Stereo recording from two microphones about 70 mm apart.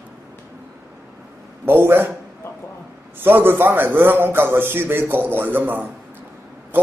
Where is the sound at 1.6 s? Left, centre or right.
Right.